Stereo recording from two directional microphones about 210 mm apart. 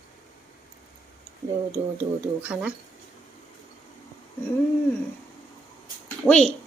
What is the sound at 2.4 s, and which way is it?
Speech, 5° right (ahead or behind).